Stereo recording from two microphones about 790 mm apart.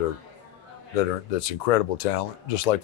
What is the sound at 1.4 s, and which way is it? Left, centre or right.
Speech, left.